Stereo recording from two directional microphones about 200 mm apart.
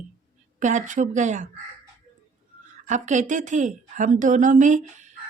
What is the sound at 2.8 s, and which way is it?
A woman's voice, 40° right (ahead or behind).